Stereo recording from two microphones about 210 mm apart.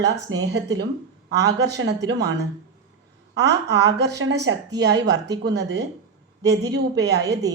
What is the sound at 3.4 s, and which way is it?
A woman's voice, 55° right (ahead or behind).